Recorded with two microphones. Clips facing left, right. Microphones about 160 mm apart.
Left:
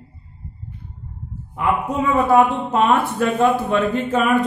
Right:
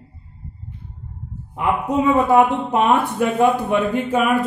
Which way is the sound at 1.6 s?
20° right (ahead or behind).